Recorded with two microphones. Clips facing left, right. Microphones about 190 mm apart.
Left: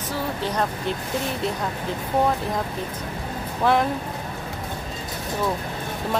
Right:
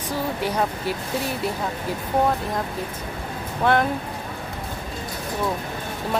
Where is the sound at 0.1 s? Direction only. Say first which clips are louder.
Right 2 dB; 10° right (ahead or behind).